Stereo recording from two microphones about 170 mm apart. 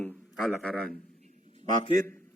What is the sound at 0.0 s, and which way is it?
Speech, 5° left (ahead or behind).